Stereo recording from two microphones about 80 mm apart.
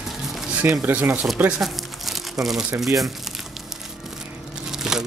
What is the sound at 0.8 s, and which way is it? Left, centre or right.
Speech, centre.